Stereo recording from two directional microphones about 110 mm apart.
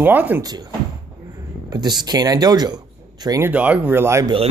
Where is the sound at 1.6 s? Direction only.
40° right (ahead or behind).